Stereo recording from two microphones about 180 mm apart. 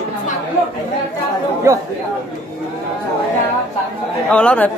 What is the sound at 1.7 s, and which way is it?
Speech, 15° right (ahead or behind).